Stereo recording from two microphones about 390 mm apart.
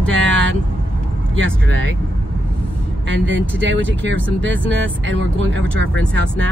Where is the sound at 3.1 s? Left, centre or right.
Right.